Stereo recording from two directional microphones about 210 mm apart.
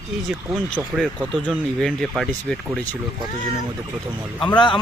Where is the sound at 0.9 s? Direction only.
Centre (ahead or behind).